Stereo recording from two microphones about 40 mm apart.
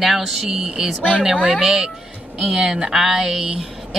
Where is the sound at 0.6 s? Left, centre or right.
Centre.